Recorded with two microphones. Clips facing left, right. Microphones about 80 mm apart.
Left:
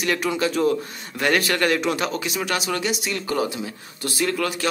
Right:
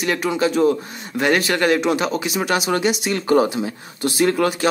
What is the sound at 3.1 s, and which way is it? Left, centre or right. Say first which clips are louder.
Speech: right 10 dB; right.